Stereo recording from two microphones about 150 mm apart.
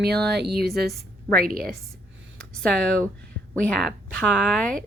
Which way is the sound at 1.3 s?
75° right (ahead or behind).